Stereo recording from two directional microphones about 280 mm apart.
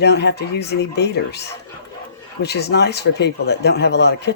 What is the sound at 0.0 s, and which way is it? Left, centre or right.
Speech, left.